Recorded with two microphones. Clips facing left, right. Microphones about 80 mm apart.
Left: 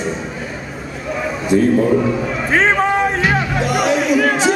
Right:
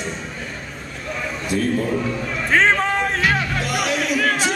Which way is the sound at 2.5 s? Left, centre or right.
Centre.